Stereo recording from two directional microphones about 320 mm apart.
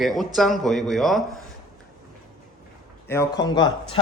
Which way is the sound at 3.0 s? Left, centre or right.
Centre.